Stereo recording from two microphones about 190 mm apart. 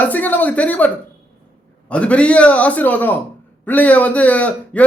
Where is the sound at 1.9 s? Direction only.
5° left (ahead or behind).